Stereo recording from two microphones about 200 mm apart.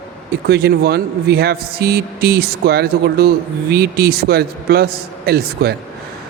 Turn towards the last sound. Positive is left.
turn(degrees=-50)  # may be behind; listen again after turning